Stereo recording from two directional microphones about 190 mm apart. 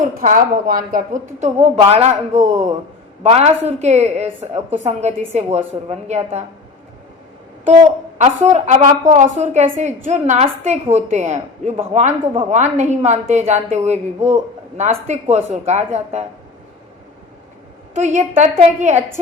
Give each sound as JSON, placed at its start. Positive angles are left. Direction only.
{"t": 0.0, "sound": "a woman's voice", "side_deg": -45}
{"t": 7.6, "sound": "a woman's voice", "side_deg": -40}
{"t": 17.9, "sound": "a woman's voice", "side_deg": -40}